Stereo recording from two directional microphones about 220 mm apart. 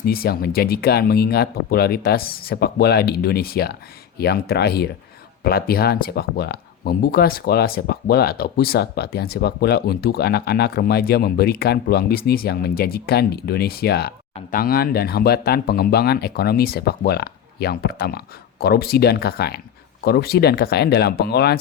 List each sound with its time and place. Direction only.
0.0 s speech: 45° left (ahead or behind)